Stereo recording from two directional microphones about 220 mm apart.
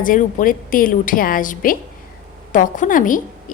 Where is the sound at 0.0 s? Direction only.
35° left (ahead or behind).